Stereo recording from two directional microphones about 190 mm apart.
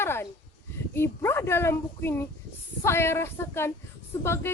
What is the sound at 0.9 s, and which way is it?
Speech, 10° left (ahead or behind).